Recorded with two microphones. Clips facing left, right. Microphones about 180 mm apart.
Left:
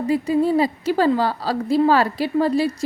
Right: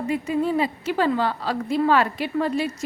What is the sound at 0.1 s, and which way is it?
A woman's voice, 35° left (ahead or behind).